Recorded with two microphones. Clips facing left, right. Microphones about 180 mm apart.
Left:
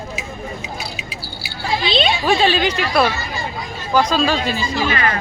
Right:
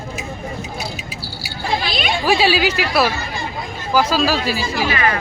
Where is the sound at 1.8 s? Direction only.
25° left (ahead or behind).